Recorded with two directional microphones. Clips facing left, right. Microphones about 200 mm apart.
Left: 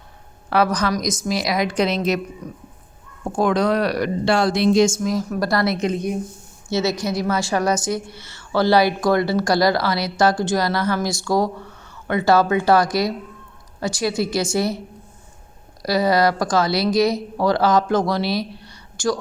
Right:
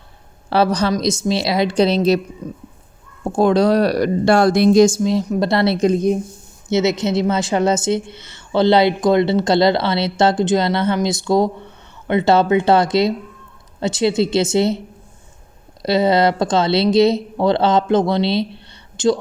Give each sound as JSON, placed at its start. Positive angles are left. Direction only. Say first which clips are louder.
{"t": 0.5, "sound": "a woman's voice", "louder": "right 3 dB", "side_deg": -30}
{"t": 3.2, "sound": "a woman's voice", "louder": "right 4 dB", "side_deg": -30}
{"t": 4.4, "sound": "a woman's voice", "louder": "right 5 dB", "side_deg": -50}
{"t": 6.7, "sound": "a woman's voice", "louder": "right 4 dB", "side_deg": -20}
{"t": 15.8, "sound": "a woman's voice", "louder": "right 3 dB", "side_deg": -25}